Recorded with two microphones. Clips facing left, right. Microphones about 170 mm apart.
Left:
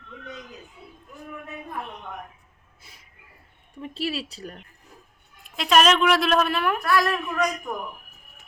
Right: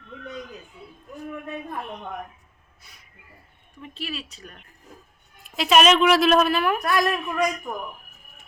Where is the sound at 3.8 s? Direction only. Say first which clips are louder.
Left 5 dB; 30° left (ahead or behind).